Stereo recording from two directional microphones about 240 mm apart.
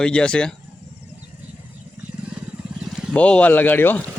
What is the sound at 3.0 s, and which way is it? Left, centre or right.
Speech, centre.